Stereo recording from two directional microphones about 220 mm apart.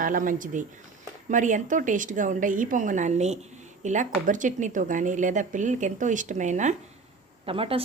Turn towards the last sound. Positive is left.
turn(degrees=-25)  # may be behind; listen again after turning